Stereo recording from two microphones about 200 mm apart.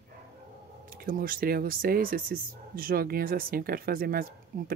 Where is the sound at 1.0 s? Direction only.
45° right (ahead or behind).